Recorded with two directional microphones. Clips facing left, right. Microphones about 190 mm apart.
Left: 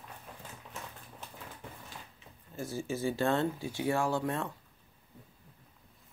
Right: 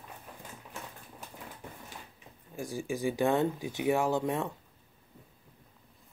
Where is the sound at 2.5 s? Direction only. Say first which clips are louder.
Right 1 dB; 15° right (ahead or behind).